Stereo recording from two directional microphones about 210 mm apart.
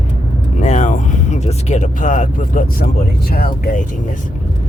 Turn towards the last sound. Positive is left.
turn(degrees=45)  # may be behind; listen again after turning